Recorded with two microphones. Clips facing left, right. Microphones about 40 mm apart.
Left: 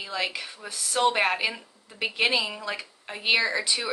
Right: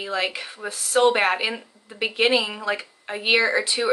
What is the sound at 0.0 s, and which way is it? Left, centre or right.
Speech, right.